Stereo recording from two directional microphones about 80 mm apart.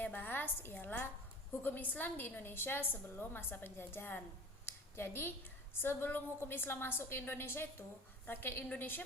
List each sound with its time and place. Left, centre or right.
0.0 s a woman's voice: left
4.6 s a sound: left
5.7 s a woman's voice: left